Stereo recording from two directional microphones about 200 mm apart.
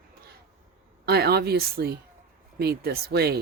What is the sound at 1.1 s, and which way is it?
Speech, 55° right (ahead or behind).